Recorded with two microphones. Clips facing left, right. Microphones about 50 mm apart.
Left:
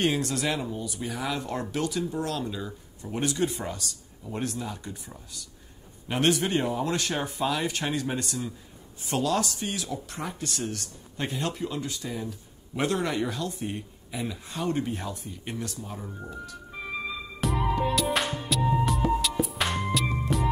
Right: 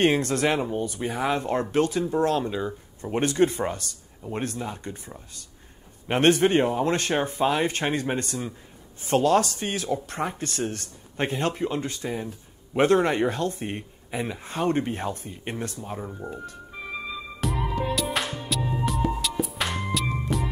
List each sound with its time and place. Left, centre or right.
0.0 s speech: right
16.7 s music: centre